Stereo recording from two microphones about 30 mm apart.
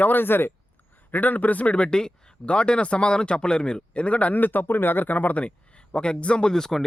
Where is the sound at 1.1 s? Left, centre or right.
Left.